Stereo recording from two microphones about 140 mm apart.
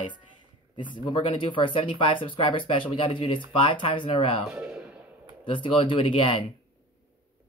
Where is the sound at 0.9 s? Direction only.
35° left (ahead or behind).